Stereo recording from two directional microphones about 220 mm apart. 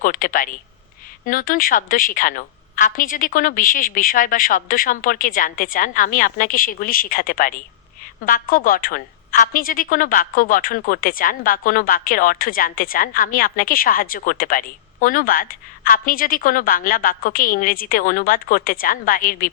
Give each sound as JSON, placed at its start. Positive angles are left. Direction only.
{"t": 0.0, "sound": "a woman's voice", "side_deg": 35}